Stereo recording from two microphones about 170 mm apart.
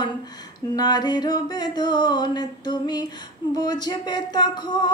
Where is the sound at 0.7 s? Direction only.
25° left (ahead or behind).